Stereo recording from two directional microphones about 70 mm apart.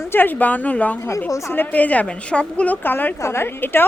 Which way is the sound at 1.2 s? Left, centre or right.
Left.